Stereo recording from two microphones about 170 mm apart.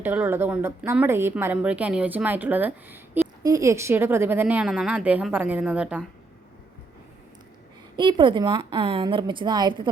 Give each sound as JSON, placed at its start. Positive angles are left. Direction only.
{"t": 0.0, "sound": "a woman's voice", "side_deg": -10}
{"t": 7.9, "sound": "a woman's voice", "side_deg": -30}